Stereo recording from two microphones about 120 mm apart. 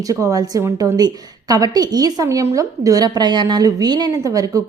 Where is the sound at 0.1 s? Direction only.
30° right (ahead or behind).